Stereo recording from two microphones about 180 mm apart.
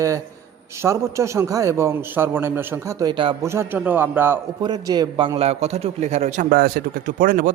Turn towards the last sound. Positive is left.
turn(degrees=-50)  # may be behind; listen again after turning